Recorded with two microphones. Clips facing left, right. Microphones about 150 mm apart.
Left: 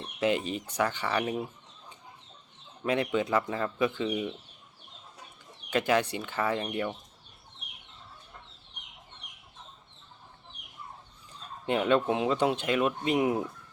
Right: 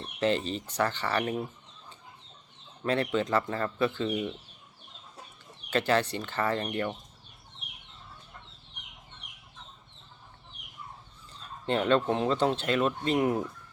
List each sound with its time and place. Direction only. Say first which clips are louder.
0.0 s speech: even; 10° left (ahead or behind)
2.8 s speech: even; 10° left (ahead or behind)
5.7 s speech: even; 10° left (ahead or behind)
11.3 s speech: even; 10° left (ahead or behind)